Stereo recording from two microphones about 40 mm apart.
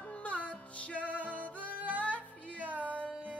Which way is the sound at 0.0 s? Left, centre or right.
Left.